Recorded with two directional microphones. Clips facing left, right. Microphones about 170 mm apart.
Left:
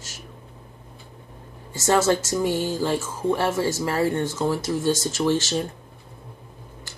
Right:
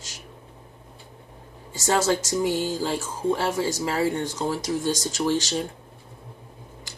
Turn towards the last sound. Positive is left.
turn(degrees=-10)  # may be behind; listen again after turning